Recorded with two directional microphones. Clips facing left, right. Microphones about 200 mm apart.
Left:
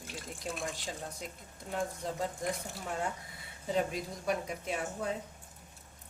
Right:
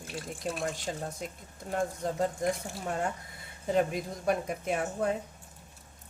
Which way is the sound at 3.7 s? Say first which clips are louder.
Right 4 dB; 55° right (ahead or behind).